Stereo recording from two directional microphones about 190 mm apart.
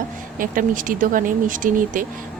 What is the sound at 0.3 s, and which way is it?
A woman's voice, 45° right (ahead or behind).